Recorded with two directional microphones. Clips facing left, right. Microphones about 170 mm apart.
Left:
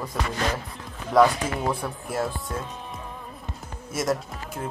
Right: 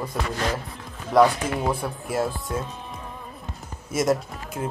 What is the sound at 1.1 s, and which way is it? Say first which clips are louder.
Speech: right 1 dB; centre (ahead or behind).